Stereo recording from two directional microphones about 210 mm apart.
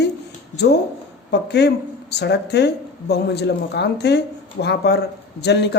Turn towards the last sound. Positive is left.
turn(degrees=55)  # may be behind; listen again after turning